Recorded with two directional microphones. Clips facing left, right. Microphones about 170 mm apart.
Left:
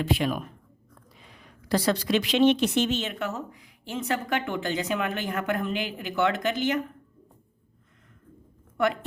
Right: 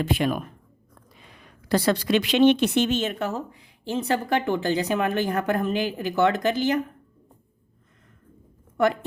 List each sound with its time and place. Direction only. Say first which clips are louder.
0.0 s speech: right 2 dB; 50° right (ahead or behind)
1.2 s a woman's voice: right 1 dB; 60° right (ahead or behind); by 6.8 s 35° right (ahead or behind)